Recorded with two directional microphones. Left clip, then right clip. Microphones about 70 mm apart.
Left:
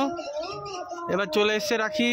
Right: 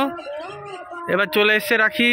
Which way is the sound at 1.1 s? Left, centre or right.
Right.